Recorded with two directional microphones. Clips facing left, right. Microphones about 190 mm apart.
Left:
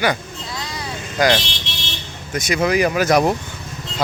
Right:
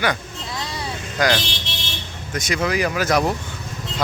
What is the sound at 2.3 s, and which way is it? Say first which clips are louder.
Speech: left 4 dB; 10° left (ahead or behind).